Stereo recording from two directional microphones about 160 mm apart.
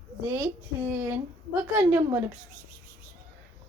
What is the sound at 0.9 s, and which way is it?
Speech, 15° right (ahead or behind).